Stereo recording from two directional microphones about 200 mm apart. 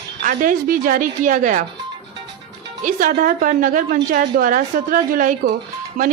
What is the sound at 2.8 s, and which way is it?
A woman's voice, 40° right (ahead or behind).